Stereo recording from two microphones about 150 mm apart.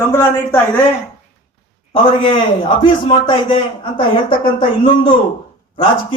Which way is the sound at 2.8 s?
35° left (ahead or behind).